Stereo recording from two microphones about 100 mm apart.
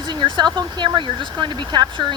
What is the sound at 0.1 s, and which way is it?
Speech, 50° right (ahead or behind).